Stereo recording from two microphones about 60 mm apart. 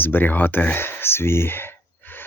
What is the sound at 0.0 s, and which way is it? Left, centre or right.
Speech, left.